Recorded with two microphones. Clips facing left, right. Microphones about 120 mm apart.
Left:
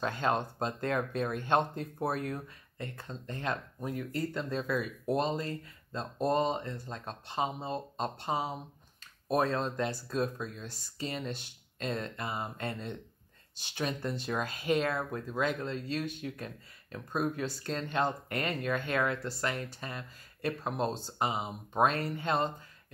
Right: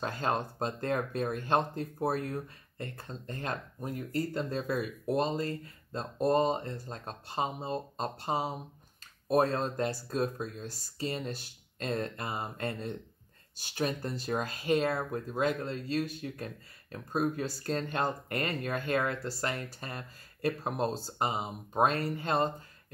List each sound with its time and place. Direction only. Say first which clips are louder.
0.0 s speech: left 1 dB; 40° right (ahead or behind)